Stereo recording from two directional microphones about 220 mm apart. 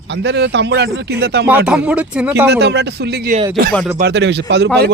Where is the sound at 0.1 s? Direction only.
50° right (ahead or behind).